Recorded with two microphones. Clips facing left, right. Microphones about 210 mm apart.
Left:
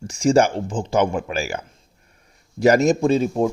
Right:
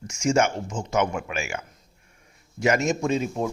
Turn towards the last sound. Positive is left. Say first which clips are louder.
# left 7 dB
turn(degrees=35)  # may be behind; listen again after turning